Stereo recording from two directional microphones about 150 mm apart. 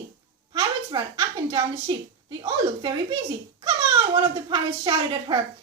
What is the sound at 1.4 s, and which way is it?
A child's voice, 35° right (ahead or behind).